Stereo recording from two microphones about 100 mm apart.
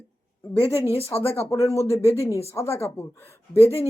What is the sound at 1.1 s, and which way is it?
Speech, 15° left (ahead or behind).